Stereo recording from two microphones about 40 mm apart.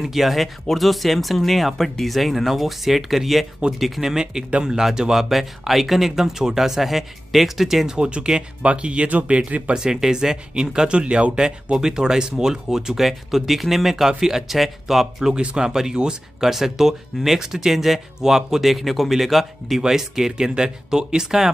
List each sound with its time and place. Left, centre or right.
0.0 s speech: centre
4.0 s speech: centre
7.9 s speech: right
9.8 s speech: centre
15.3 s speech: right